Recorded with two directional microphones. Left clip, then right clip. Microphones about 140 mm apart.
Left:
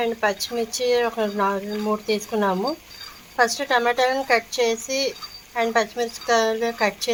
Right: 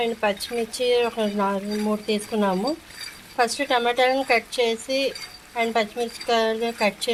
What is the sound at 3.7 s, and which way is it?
Speech, 15° right (ahead or behind).